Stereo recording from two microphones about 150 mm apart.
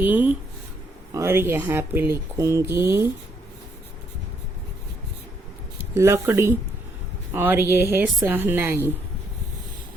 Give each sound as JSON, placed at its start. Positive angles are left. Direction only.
{"t": 0.0, "sound": "a sound", "side_deg": -10}
{"t": 1.1, "sound": "speech", "side_deg": -15}
{"t": 5.9, "sound": "speech", "side_deg": -20}